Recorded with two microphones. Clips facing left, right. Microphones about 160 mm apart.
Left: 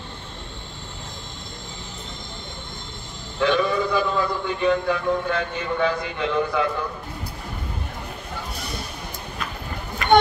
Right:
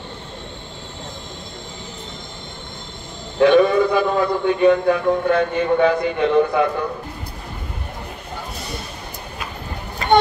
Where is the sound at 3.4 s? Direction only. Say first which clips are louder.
Right 8 dB; 55° right (ahead or behind).